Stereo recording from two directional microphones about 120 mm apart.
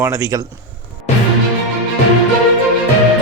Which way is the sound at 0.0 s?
25° right (ahead or behind).